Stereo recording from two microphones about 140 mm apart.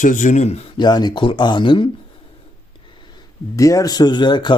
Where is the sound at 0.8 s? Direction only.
30° left (ahead or behind).